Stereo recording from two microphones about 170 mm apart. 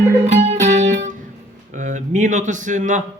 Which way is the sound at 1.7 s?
45° right (ahead or behind).